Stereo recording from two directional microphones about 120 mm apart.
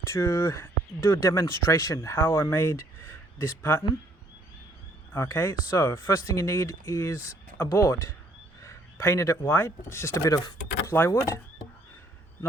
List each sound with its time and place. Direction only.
0.1 s speech: 25° left (ahead or behind)
5.1 s speech: 25° left (ahead or behind)